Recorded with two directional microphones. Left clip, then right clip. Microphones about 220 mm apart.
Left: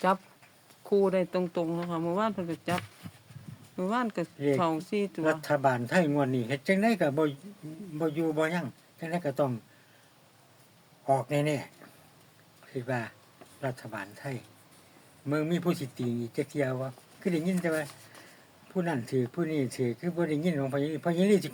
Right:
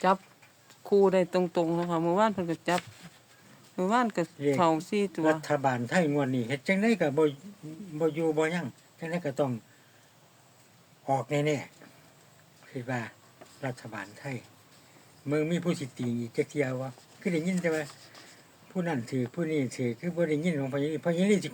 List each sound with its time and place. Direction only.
0.9 s speech: 15° right (ahead or behind)
3.8 s speech: 20° right (ahead or behind)
5.2 s speech: centre (ahead or behind)
11.0 s speech: 5° left (ahead or behind)